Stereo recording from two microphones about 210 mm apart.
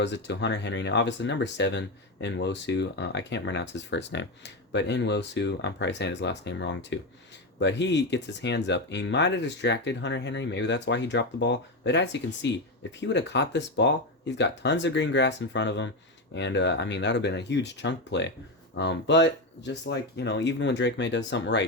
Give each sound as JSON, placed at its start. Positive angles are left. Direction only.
{"t": 0.0, "sound": "speech", "side_deg": 55}